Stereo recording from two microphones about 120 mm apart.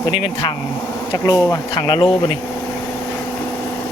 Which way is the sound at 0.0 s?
40° left (ahead or behind).